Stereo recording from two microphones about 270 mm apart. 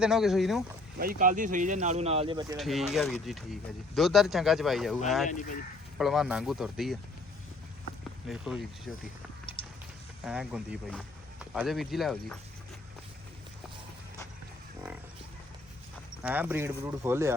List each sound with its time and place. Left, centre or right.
0.0 s speech: centre
0.9 s speech: right; by 2.6 s centre
2.6 s speech: centre
8.3 s speech: centre
9.6 s a sound: centre
10.2 s speech: centre
16.2 s speech: centre